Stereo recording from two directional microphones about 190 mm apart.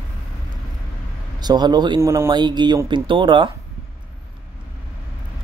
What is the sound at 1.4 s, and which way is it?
Speech, 20° right (ahead or behind).